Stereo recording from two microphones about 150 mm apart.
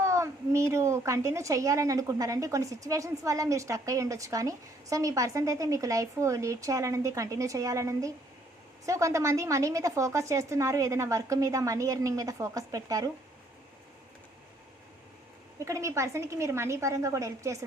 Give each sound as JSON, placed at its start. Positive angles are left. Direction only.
{"t": 0.0, "sound": "a woman's voice", "side_deg": -20}
{"t": 15.5, "sound": "a woman's voice", "side_deg": -20}